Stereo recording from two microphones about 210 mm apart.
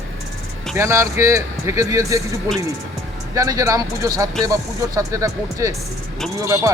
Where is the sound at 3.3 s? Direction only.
15° right (ahead or behind).